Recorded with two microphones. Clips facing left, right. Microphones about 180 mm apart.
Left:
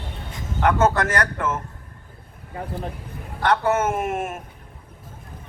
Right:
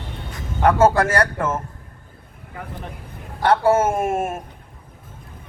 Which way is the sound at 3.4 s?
30° right (ahead or behind).